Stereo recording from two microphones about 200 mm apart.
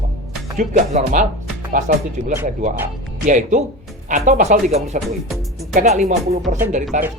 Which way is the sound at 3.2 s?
40° right (ahead or behind).